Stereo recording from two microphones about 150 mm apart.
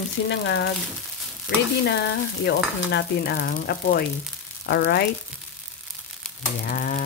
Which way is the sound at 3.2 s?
90° left.